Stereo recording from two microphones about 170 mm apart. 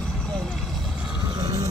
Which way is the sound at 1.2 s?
25° right (ahead or behind).